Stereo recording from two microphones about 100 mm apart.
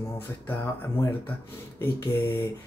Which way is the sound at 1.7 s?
25° left (ahead or behind).